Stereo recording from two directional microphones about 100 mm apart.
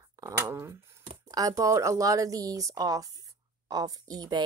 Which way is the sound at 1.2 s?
35° right (ahead or behind).